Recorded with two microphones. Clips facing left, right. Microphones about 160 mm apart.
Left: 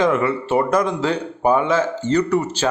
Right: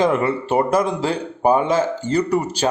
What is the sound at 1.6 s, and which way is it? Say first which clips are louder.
Speech: even; 15° right (ahead or behind).